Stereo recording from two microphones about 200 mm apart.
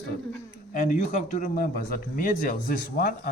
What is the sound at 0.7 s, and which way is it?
Speech, 40° left (ahead or behind).